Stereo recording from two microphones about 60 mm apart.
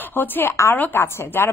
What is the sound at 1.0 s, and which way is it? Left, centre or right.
Speech, left.